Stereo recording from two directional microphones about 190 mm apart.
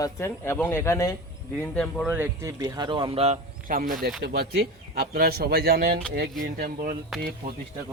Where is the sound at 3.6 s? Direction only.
45° right (ahead or behind).